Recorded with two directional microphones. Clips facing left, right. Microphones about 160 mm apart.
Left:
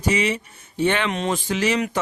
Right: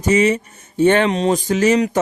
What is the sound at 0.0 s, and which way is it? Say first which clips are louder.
Speech: right 7 dB; 45° right (ahead or behind).